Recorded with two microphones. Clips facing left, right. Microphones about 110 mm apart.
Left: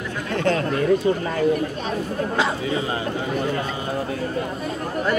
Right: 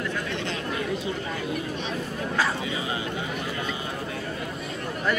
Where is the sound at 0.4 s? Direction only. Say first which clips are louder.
Left 9 dB; 50° left (ahead or behind).